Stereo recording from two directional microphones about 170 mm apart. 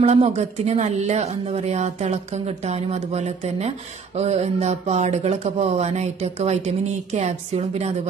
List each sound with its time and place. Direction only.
0.0 s speech: 40° right (ahead or behind)